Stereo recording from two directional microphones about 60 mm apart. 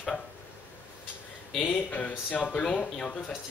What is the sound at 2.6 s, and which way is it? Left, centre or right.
Speech, centre.